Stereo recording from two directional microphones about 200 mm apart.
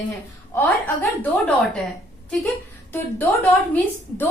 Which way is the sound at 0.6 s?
10° left (ahead or behind).